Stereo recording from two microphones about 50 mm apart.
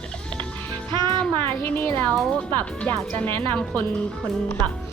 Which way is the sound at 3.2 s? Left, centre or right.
Left.